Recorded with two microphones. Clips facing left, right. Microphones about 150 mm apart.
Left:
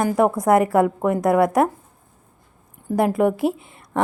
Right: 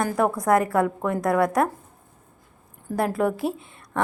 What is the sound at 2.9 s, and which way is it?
Speech, 20° left (ahead or behind).